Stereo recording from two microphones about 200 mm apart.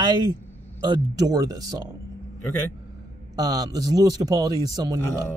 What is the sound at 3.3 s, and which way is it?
A man's voice, 20° right (ahead or behind).